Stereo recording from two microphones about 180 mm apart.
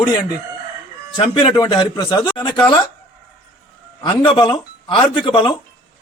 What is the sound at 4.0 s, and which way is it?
A man's voice, 25° left (ahead or behind).